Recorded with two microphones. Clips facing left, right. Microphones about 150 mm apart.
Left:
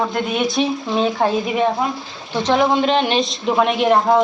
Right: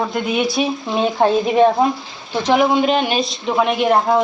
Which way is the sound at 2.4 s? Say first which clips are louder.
Right 1 dB; 10° right (ahead or behind).